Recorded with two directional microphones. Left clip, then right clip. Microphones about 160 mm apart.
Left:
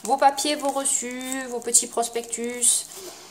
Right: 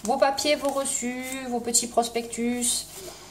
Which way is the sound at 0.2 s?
45° left (ahead or behind).